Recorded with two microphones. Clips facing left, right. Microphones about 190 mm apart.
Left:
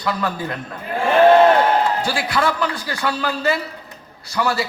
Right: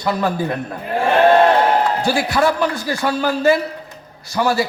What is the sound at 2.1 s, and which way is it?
A man's voice, 25° right (ahead or behind).